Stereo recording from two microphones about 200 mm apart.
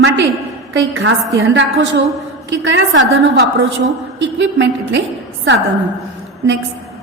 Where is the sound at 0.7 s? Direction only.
70° right (ahead or behind).